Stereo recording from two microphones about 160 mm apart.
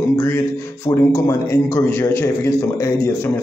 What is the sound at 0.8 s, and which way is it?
A man's voice, 20° left (ahead or behind).